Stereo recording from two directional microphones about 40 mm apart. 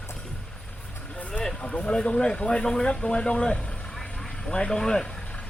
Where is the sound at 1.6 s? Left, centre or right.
Left.